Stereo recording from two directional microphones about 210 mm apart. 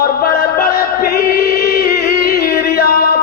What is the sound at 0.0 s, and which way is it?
Chant, 45° left (ahead or behind).